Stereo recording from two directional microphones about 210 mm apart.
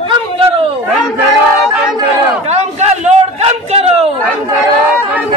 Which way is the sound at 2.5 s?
30° right (ahead or behind).